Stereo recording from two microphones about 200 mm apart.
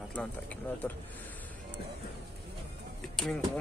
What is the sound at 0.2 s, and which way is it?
Speech, 5° left (ahead or behind).